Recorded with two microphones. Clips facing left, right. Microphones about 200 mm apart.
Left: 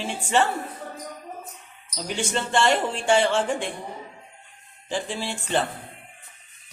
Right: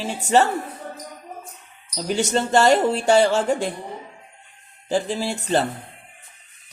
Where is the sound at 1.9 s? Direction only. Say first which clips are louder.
Right 6 dB; 40° right (ahead or behind).